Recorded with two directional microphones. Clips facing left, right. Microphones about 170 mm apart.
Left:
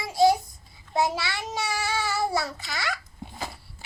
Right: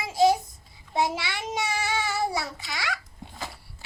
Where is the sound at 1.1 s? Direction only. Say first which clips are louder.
Even; 15° right (ahead or behind).